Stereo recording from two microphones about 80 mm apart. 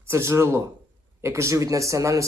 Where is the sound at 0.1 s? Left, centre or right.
Right.